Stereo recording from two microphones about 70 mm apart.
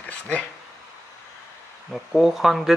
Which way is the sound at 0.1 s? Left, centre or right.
Centre.